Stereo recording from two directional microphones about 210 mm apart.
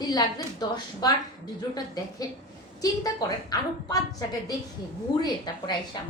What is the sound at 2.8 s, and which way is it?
A woman's voice, 15° left (ahead or behind).